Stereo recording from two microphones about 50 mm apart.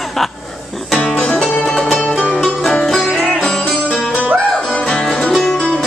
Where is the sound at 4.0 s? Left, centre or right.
Left.